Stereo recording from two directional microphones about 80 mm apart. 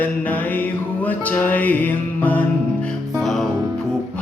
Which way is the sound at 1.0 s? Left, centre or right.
Left.